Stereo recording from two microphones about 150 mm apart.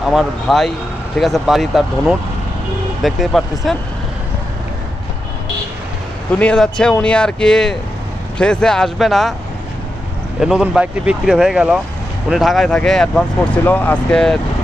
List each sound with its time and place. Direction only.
0.0 s speech: centre (ahead or behind)
6.3 s speech: 5° left (ahead or behind)
10.4 s speech: 5° right (ahead or behind)